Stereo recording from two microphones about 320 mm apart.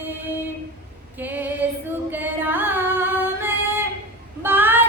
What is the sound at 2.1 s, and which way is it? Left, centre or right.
Singing, centre.